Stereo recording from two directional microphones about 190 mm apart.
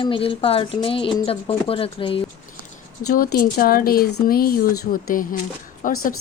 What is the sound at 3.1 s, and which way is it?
Speech, 50° left (ahead or behind).